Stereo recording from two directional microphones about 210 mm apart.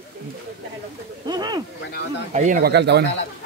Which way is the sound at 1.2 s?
20° right (ahead or behind).